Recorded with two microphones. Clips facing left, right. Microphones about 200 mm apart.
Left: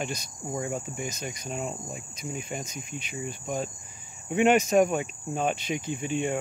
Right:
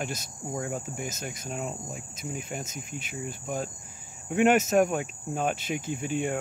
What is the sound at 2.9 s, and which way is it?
Cricket, 50° right (ahead or behind).